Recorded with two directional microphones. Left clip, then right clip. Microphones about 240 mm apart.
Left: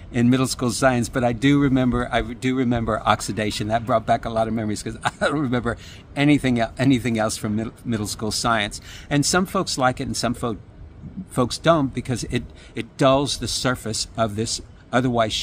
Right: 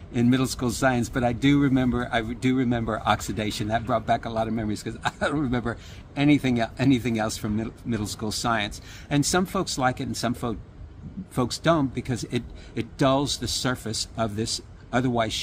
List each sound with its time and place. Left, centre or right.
0.1 s speech: left